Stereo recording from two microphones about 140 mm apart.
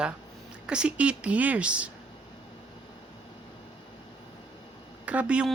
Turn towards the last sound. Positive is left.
turn(degrees=-10)  # may be behind; listen again after turning